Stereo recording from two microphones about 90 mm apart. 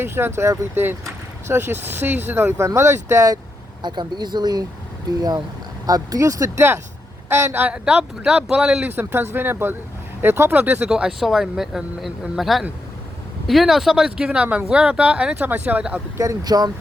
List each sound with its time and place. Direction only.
0.0 s speech: 25° right (ahead or behind)
3.8 s speech: 55° right (ahead or behind)
5.8 s speech: 45° right (ahead or behind)
7.3 s speech: 25° right (ahead or behind)
7.7 s speech: 10° right (ahead or behind)
9.0 s speech: 25° right (ahead or behind)
10.8 s speech: 10° right (ahead or behind)
16.1 s speech: 40° right (ahead or behind)